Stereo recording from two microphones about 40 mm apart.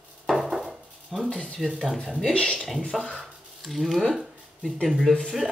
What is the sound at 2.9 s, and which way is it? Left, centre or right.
Speech, centre.